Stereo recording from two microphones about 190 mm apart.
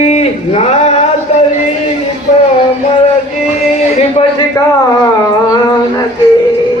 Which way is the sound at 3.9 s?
30° left (ahead or behind).